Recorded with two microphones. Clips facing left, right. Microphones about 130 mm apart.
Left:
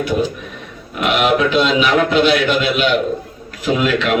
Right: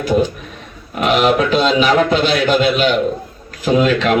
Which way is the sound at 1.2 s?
35° right (ahead or behind).